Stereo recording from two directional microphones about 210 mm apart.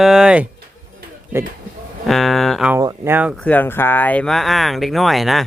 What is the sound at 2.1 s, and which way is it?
Speech, centre (ahead or behind).